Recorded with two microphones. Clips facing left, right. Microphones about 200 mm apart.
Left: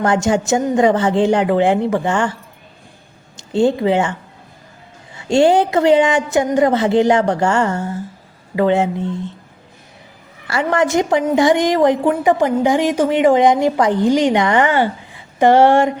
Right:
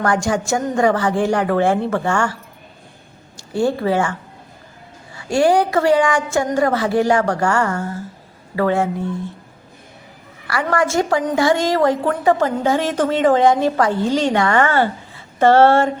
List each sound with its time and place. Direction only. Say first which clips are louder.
0.0 s a woman's voice: left 3 dB; 20° left (ahead or behind)
3.3 s speech: left 4 dB; 20° left (ahead or behind)
5.1 s a woman's voice: left 3 dB; 25° left (ahead or behind)
10.4 s a woman's voice: left 2 dB; 25° left (ahead or behind)